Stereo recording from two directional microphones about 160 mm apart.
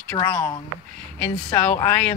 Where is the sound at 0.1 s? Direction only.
20° left (ahead or behind).